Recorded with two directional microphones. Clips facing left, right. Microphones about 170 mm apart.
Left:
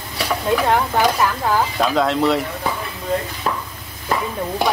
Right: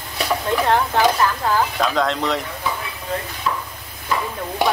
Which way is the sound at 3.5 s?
50° left (ahead or behind).